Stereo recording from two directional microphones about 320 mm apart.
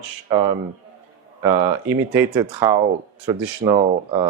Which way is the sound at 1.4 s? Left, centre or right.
Centre.